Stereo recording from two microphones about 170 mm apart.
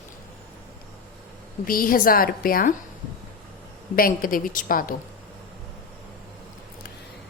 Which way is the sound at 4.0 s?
55° left (ahead or behind).